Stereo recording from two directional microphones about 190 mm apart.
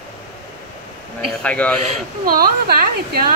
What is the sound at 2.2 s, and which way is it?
A woman's voice, 50° right (ahead or behind).